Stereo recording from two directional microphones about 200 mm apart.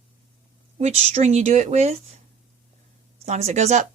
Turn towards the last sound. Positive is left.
turn(degrees=-35)  # may be behind; listen again after turning